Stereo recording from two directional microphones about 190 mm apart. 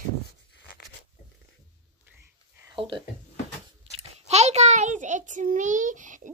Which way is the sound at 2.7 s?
25° right (ahead or behind).